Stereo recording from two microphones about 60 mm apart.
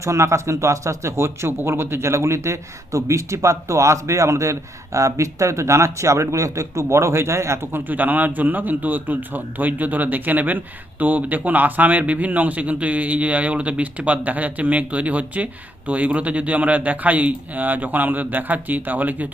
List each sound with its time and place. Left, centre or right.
0.0 s a man's voice: right
7.9 s a man's voice: right